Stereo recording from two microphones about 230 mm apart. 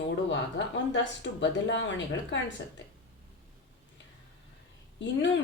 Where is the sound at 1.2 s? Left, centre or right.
Left.